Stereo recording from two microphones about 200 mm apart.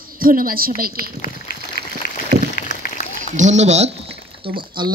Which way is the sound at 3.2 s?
35° right (ahead or behind).